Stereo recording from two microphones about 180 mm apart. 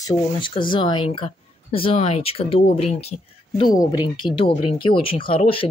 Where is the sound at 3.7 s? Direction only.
20° left (ahead or behind).